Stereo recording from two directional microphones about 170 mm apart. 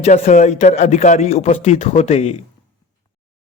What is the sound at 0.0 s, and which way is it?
A man's voice, 40° left (ahead or behind).